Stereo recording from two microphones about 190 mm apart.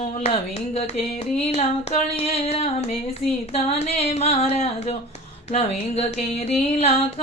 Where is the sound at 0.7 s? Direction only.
30° left (ahead or behind).